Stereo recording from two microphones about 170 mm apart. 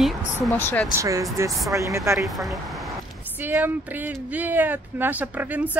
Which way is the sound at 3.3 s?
10° right (ahead or behind).